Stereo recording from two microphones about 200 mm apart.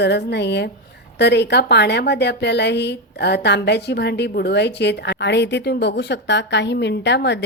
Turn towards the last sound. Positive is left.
turn(degrees=60)  # may be behind; listen again after turning